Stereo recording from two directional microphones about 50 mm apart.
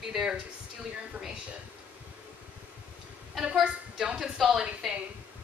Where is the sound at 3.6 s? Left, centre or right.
Centre.